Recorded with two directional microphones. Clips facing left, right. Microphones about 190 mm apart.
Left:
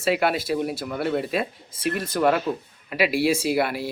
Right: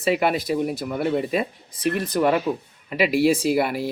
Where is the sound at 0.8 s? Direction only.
Centre (ahead or behind).